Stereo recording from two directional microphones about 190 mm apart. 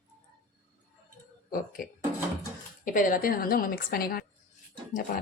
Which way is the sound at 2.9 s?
45° left (ahead or behind).